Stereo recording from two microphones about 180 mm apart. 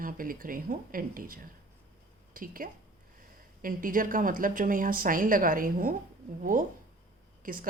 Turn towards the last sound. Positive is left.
turn(degrees=-50)  # may be behind; listen again after turning